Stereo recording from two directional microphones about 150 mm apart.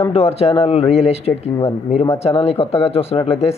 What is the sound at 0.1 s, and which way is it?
Speech, 40° left (ahead or behind).